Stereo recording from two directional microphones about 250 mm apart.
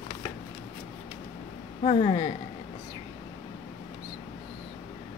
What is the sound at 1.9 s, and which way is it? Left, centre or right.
Speech, left.